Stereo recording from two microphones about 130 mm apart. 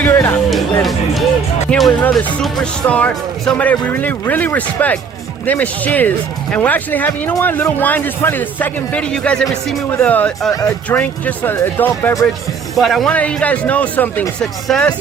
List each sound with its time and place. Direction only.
0.0 s music: 20° left (ahead or behind)
0.5 s music: centre (ahead or behind)
1.7 s speech: 5° left (ahead or behind)
12.7 s speech: centre (ahead or behind)